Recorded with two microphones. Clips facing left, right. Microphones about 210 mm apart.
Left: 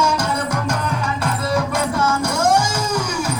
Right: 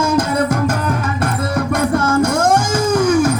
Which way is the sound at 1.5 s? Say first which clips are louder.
Right 5 dB; 55° right (ahead or behind).